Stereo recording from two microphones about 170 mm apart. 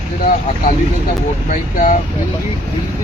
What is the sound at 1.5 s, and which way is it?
Speech, 45° left (ahead or behind).